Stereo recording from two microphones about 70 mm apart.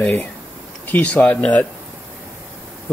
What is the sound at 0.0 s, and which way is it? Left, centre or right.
Speech, left.